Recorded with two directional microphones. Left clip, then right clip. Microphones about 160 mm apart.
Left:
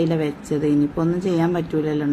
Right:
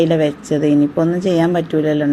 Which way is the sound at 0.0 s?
5° right (ahead or behind).